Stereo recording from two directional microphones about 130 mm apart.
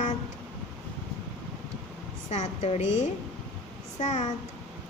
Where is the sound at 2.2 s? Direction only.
60° left (ahead or behind).